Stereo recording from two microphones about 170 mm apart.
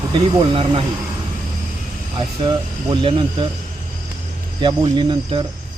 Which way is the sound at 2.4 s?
30° right (ahead or behind).